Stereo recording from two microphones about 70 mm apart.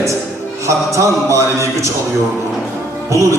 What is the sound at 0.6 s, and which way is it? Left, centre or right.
A man's voice, right.